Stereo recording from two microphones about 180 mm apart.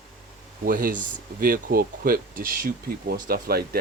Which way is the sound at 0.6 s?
55° right (ahead or behind).